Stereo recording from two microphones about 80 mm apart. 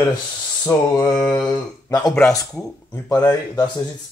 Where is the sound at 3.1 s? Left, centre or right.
Left.